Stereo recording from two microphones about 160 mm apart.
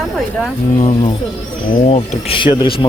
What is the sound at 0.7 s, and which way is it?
Speech, 45° left (ahead or behind).